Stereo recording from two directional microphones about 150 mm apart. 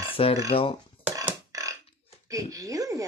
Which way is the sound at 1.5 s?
20° right (ahead or behind).